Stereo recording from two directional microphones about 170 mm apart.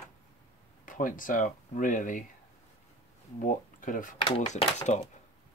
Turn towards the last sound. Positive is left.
turn(degrees=40)  # may be behind; listen again after turning